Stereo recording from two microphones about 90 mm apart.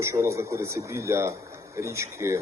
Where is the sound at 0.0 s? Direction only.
30° right (ahead or behind).